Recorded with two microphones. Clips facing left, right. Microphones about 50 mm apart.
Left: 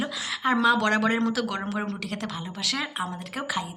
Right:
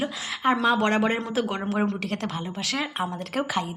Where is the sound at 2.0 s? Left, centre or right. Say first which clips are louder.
Right 3 dB; right.